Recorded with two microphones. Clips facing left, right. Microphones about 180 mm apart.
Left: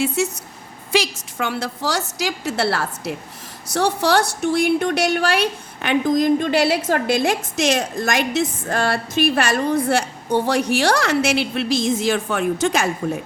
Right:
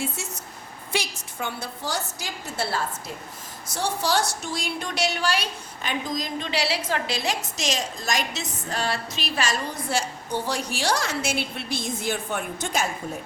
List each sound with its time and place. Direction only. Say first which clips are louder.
0.0 s speech: left 11 dB; 75° left (ahead or behind)
0.9 s a woman's voice: left 9 dB; 90° left